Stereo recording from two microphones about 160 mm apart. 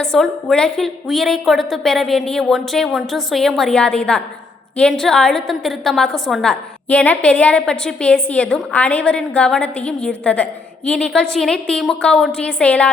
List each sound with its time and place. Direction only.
0.0 s a woman's voice: 5° left (ahead or behind)